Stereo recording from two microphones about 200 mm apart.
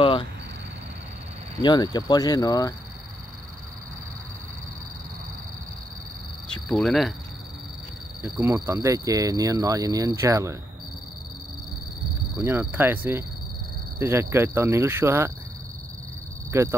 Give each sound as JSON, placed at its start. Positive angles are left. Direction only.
{"t": 0.0, "sound": "a sound", "side_deg": 25}
{"t": 1.6, "sound": "speech", "side_deg": 20}
{"t": 6.5, "sound": "cricket", "side_deg": 0}
{"t": 8.2, "sound": "speech", "side_deg": -15}
{"t": 12.4, "sound": "speech", "side_deg": -10}
{"t": 16.5, "sound": "speech", "side_deg": -15}